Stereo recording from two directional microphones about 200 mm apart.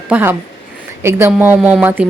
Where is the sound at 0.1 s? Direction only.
10° right (ahead or behind).